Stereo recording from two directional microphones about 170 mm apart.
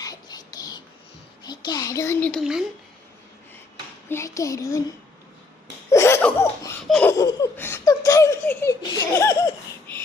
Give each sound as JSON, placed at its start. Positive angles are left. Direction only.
{"t": 0.0, "sound": "a sound", "side_deg": 20}
{"t": 1.5, "sound": "a child's voice", "side_deg": 25}
{"t": 2.3, "sound": "speech", "side_deg": 0}
{"t": 4.1, "sound": "speech", "side_deg": 15}
{"t": 5.9, "sound": "laughter", "side_deg": 15}
{"t": 6.8, "sound": "speech", "side_deg": 0}
{"t": 7.1, "sound": "speech", "side_deg": 20}